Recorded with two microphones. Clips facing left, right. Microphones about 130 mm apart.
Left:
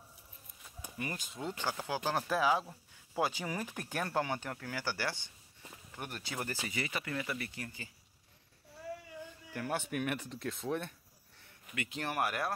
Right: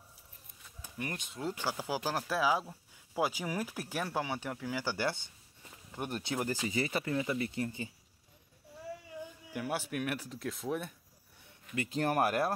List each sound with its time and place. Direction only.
0.8 s speech: 5° left (ahead or behind); by 6.6 s 15° right (ahead or behind)
6.7 s speech: 30° right (ahead or behind)
9.5 s speech: 10° right (ahead or behind)
11.7 s speech: 35° right (ahead or behind)